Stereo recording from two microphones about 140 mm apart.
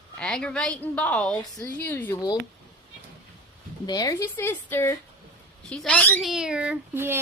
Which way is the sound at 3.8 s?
25° left (ahead or behind).